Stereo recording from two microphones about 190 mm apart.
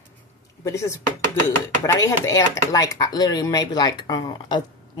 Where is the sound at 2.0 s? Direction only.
15° left (ahead or behind).